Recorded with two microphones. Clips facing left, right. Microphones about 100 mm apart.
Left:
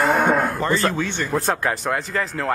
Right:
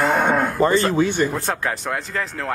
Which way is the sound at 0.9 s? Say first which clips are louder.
Right 7 dB; 15° right (ahead or behind).